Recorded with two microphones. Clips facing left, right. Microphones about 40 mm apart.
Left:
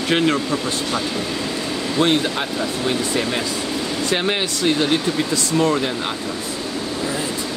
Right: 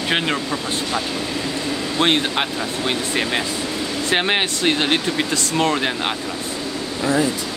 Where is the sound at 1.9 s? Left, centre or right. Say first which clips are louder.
Even; right.